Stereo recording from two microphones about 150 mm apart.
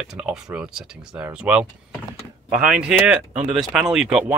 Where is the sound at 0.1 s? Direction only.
5° right (ahead or behind).